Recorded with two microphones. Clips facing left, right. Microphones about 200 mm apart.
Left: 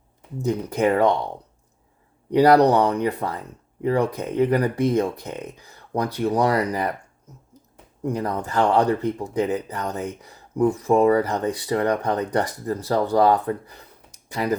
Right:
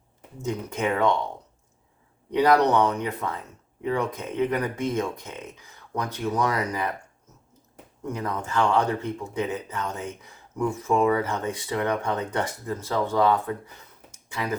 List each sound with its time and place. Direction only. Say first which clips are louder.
0.4 s speech: left 6 dB; 35° left (ahead or behind)
2.3 s speech: left 5 dB; 35° left (ahead or behind)
8.0 s speech: left 5 dB; 35° left (ahead or behind)